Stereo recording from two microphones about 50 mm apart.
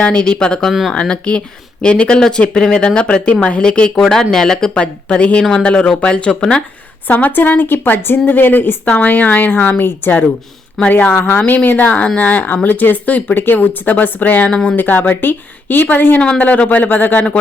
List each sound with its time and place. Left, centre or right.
0.0 s speech: centre
3.9 s speech: centre; by 6.6 s left
7.1 s a woman's voice: left
8.8 s speech: left
10.8 s speech: centre
11.1 s speech: left
11.3 s speech: left
14.5 s speech: centre
14.8 s speech: left